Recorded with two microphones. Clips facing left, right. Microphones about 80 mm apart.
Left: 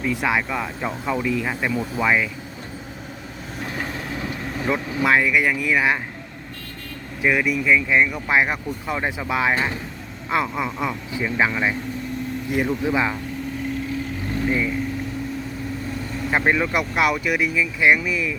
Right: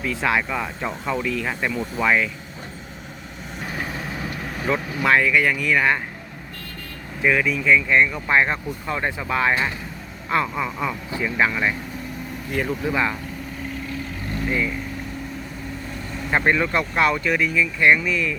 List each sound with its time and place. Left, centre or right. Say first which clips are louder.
0.0 s speech: even; centre
3.8 s vehicle: even; centre
5.0 s speech: even; centre
7.2 s speech: even; centre
14.5 s speech: even; centre
16.3 s speech: even; centre